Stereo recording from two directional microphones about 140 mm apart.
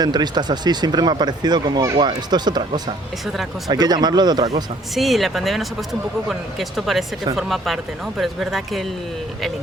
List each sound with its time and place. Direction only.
0.0 s speech: 30° right (ahead or behind)
4.9 s speech: centre (ahead or behind)